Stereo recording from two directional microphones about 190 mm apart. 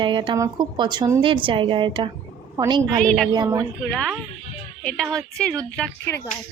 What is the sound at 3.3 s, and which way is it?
Speech, 20° right (ahead or behind).